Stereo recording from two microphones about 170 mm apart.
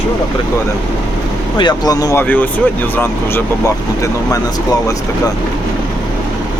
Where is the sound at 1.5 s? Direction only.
25° left (ahead or behind).